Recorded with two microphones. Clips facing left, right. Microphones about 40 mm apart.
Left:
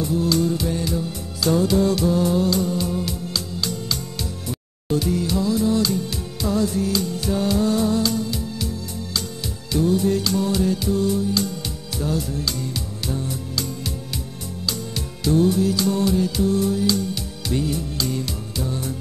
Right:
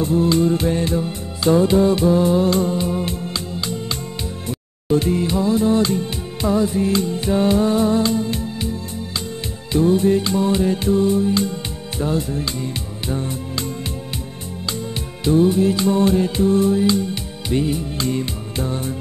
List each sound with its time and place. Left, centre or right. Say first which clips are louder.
0.0 s music: right 4 dB; right
15.2 s music: right 3 dB; right